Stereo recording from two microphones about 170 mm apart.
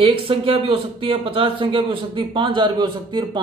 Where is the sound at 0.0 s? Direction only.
30° right (ahead or behind).